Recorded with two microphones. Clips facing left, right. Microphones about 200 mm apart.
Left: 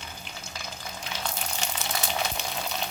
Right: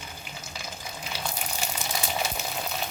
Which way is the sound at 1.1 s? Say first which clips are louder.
Even; 10° right (ahead or behind).